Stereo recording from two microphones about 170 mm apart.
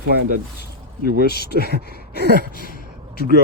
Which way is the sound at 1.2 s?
65° left (ahead or behind).